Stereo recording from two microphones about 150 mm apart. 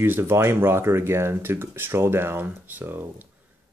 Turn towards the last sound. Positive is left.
turn(degrees=-10)  # may be behind; listen again after turning